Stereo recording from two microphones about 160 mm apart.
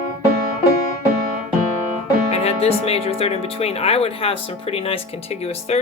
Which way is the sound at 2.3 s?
40° left (ahead or behind).